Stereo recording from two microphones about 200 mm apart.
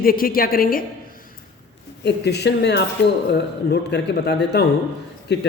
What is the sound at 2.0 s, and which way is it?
A man's voice, 55° left (ahead or behind).